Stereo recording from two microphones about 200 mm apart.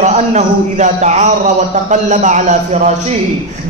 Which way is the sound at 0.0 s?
35° right (ahead or behind).